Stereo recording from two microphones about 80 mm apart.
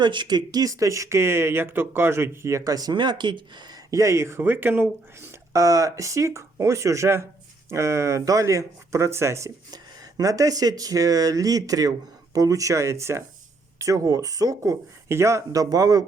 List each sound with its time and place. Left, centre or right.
0.0 s speech: right
2.9 s speech: right
3.9 s speech: right
5.5 s speech: right
9.7 s speech: right